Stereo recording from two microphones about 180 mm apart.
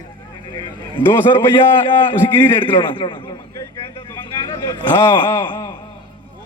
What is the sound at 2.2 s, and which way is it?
Speech, 10° left (ahead or behind).